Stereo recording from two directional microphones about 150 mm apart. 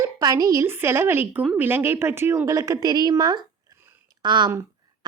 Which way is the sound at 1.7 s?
15° right (ahead or behind).